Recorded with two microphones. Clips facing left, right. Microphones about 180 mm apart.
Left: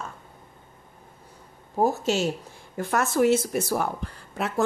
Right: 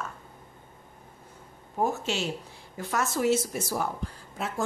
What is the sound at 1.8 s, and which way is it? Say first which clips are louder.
Speech: left 5 dB; 35° left (ahead or behind).